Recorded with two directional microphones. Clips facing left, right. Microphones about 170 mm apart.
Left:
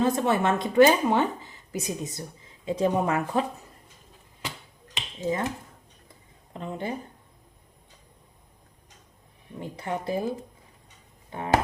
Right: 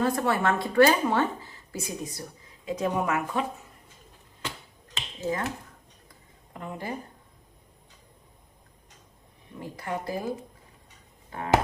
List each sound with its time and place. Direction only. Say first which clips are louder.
0.0 s a woman's voice: left 2 dB; 20° left (ahead or behind)
4.9 s finger snapping: left 2 dB; 20° left (ahead or behind)
6.5 s speech: left 3 dB; 25° left (ahead or behind)
9.6 s a woman's voice: left 2 dB; 25° left (ahead or behind)
11.3 s a sound: left 2 dB; 20° left (ahead or behind)